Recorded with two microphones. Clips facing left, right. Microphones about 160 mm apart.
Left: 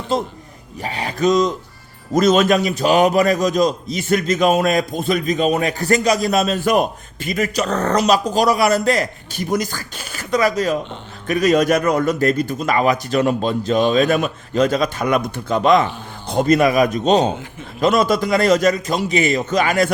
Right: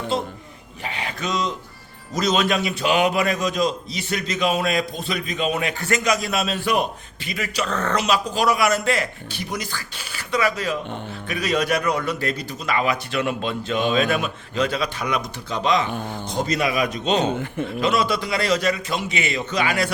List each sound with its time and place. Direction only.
0.1 s a man's voice: 40° left (ahead or behind)